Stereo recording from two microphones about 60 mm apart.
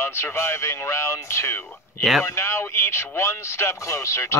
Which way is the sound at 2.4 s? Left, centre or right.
Left.